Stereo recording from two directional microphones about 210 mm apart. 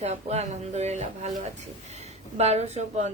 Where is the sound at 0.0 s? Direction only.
30° right (ahead or behind).